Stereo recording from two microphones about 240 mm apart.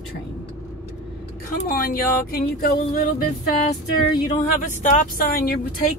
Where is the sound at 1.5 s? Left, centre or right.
Left.